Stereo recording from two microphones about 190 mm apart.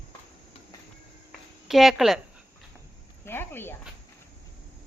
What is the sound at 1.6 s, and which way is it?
Speech, centre (ahead or behind).